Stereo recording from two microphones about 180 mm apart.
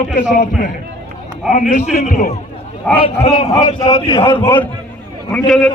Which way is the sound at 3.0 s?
30° left (ahead or behind).